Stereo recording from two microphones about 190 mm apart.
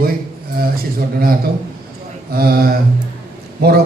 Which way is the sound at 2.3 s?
50° right (ahead or behind).